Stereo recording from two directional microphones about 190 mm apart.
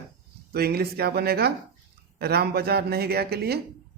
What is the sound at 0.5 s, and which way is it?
A woman's voice, 55° right (ahead or behind).